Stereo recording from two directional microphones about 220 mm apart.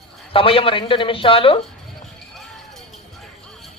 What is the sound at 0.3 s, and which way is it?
A man's voice, 25° left (ahead or behind).